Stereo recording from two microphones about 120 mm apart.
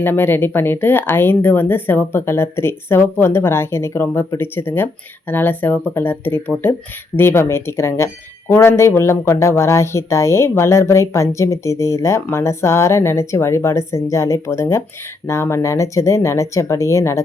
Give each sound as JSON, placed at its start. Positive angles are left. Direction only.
{"t": 0.0, "sound": "speech", "side_deg": 15}